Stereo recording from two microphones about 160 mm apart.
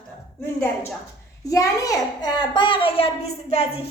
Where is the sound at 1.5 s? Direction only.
20° left (ahead or behind).